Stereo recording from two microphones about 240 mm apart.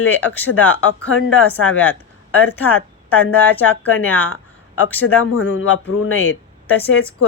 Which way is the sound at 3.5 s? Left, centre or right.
Centre.